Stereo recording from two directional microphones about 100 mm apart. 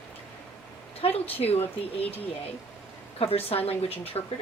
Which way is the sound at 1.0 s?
80° left.